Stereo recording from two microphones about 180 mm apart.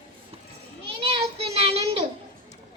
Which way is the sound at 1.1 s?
35° right (ahead or behind).